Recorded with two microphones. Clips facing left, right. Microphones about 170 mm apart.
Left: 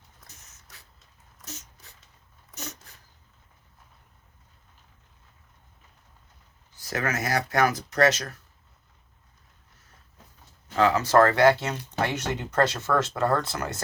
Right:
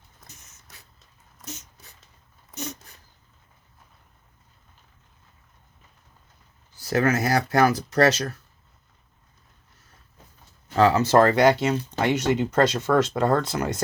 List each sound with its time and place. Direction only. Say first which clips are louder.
6.8 s speech: right 7 dB; 30° right (ahead or behind)
10.8 s speech: right 2 dB; 30° right (ahead or behind); by 13.8 s 15° right (ahead or behind)